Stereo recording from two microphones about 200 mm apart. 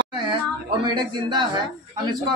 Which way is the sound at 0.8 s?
20° right (ahead or behind).